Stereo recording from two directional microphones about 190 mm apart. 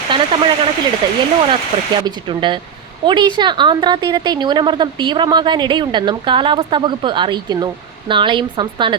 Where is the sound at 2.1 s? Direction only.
25° right (ahead or behind).